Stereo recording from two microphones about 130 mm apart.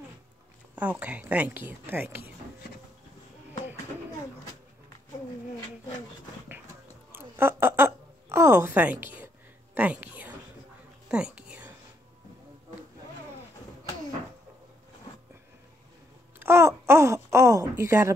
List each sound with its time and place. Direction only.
0.7 s speech: 10° right (ahead or behind)
7.1 s a sound: 20° right (ahead or behind)
9.8 s whispering: 10° right (ahead or behind)
16.3 s speech: 20° right (ahead or behind)